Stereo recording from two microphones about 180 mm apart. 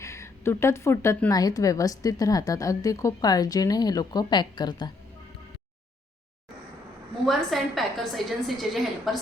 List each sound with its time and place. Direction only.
0.0 s speech: 15° left (ahead or behind)
7.3 s a woman's voice: centre (ahead or behind)